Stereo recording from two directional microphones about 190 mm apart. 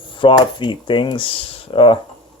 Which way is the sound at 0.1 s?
25° left (ahead or behind).